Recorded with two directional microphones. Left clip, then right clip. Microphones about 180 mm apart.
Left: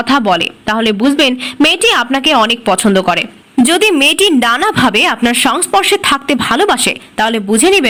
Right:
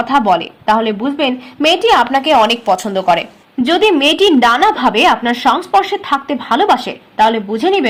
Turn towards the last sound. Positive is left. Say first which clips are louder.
# left 4 dB
turn(degrees=20)  # may be behind; listen again after turning